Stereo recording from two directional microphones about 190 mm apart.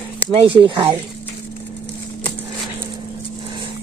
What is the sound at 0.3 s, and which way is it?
Speech, 25° right (ahead or behind).